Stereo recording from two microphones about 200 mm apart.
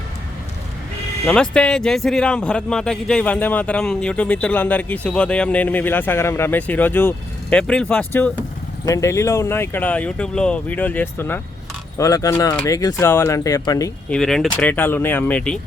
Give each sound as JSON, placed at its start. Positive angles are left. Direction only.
{"t": 1.3, "sound": "a man's voice", "side_deg": 5}
{"t": 14.1, "sound": "a man's voice", "side_deg": 0}